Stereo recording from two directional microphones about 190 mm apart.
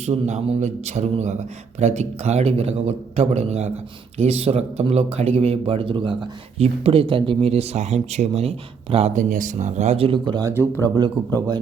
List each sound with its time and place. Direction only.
0.0 s speech: 35° right (ahead or behind); by 11.6 s 20° right (ahead or behind)